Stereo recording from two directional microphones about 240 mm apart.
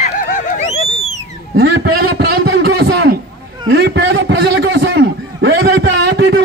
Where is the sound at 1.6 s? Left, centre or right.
Right.